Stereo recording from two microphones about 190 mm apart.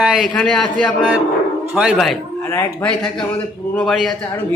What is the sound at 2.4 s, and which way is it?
A man's voice, 10° left (ahead or behind).